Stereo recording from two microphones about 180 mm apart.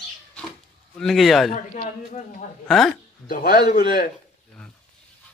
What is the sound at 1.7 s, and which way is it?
Speech, 45° left (ahead or behind).